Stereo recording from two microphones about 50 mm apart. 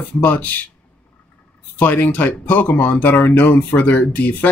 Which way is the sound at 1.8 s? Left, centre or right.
Left.